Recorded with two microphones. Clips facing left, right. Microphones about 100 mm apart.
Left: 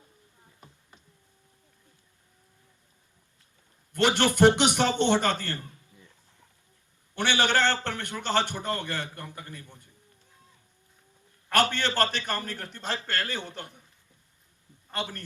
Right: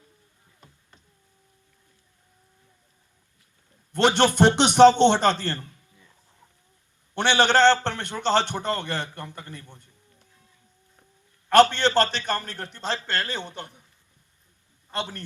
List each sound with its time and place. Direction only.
3.9 s a man's voice: 25° right (ahead or behind)
7.3 s a man's voice: 25° right (ahead or behind)
11.5 s a man's voice: 25° right (ahead or behind)
14.9 s a man's voice: 25° right (ahead or behind)